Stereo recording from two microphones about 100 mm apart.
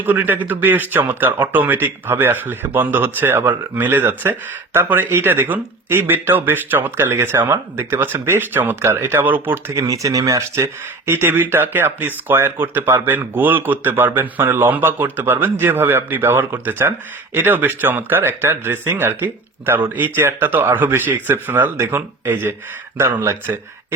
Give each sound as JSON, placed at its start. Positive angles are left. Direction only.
{"t": 0.0, "sound": "speech", "side_deg": -20}
{"t": 9.7, "sound": "speech", "side_deg": -35}